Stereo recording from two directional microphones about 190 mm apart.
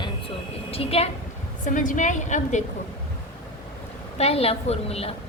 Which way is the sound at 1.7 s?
40° left (ahead or behind).